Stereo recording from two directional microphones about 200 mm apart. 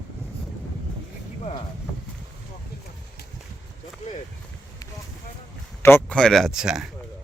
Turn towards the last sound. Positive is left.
turn(degrees=-5)  # may be behind; listen again after turning